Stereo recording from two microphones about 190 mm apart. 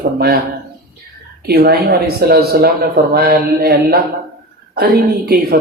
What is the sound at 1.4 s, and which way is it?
Speech, 55° right (ahead or behind).